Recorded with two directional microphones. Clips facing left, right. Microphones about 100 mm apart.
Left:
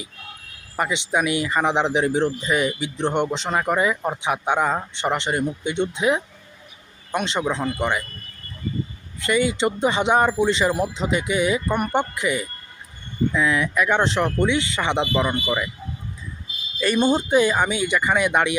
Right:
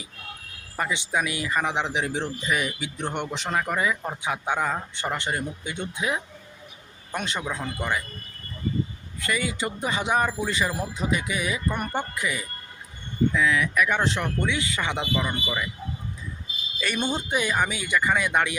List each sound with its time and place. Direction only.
0.8 s speech: 20° left (ahead or behind); by 2.6 s 35° left (ahead or behind)
2.6 s speech: 25° left (ahead or behind)
9.2 s speech: 25° left (ahead or behind)
16.8 s speech: 40° left (ahead or behind); by 18.5 s 20° left (ahead or behind)